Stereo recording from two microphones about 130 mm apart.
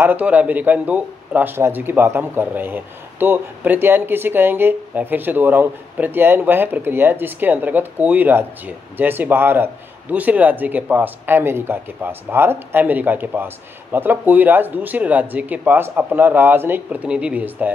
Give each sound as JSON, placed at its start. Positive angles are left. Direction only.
{"t": 0.0, "sound": "a man's voice", "side_deg": -10}